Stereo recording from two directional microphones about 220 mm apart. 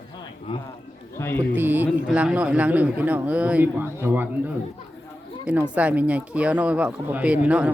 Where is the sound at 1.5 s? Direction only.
10° right (ahead or behind).